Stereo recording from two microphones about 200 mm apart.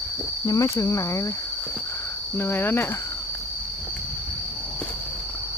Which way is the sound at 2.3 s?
10° left (ahead or behind).